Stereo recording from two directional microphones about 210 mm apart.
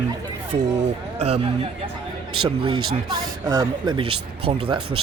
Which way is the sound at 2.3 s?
25° right (ahead or behind).